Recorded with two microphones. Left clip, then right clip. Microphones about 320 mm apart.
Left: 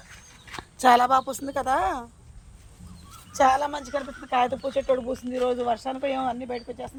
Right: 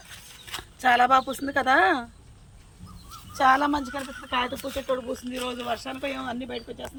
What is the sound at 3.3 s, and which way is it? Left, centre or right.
Speech, left.